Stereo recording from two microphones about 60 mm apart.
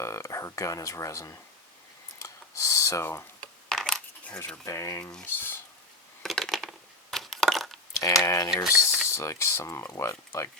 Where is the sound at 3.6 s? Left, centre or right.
Centre.